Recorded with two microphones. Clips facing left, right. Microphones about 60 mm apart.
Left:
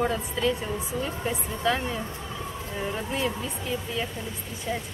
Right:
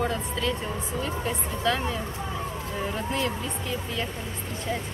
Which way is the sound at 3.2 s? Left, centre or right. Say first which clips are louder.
Even; centre.